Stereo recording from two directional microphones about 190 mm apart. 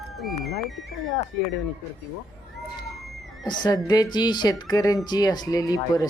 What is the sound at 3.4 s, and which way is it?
Speech, 20° left (ahead or behind).